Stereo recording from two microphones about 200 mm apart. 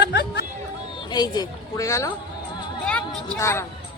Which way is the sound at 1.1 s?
20° left (ahead or behind).